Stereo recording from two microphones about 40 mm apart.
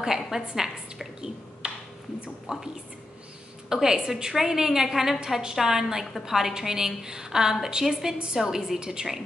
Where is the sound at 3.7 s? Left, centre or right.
Centre.